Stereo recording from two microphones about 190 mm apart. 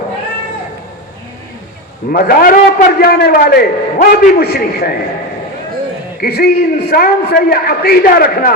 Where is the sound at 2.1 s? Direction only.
50° left (ahead or behind).